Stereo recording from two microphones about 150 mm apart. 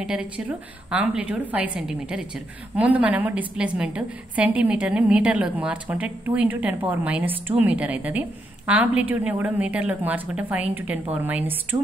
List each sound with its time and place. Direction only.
0.0 s a woman's voice: 5° right (ahead or behind)
11.7 s music: 25° right (ahead or behind)